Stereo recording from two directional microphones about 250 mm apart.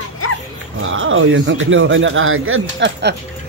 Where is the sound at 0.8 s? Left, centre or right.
Right.